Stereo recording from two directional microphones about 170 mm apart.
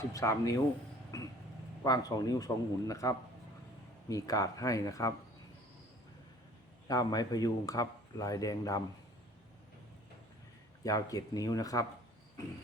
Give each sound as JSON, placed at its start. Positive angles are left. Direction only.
{"t": 0.1, "sound": "speech", "side_deg": 20}
{"t": 1.1, "sound": "vehicle", "side_deg": 20}
{"t": 1.8, "sound": "speech", "side_deg": 20}
{"t": 6.8, "sound": "speech", "side_deg": 20}
{"t": 10.8, "sound": "speech", "side_deg": 20}